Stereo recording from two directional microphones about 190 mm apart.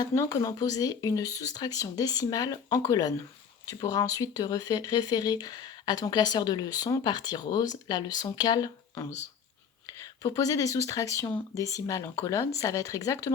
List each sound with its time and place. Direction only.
0.0 s speech: 20° left (ahead or behind)
10.2 s speech: 20° left (ahead or behind)